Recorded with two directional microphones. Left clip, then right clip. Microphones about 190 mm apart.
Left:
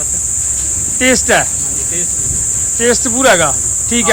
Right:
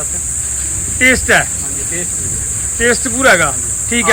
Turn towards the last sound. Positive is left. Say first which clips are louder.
# left 1 dB
turn(degrees=15)  # may be behind; listen again after turning